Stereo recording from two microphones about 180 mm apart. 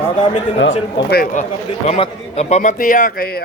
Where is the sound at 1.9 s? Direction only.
35° left (ahead or behind).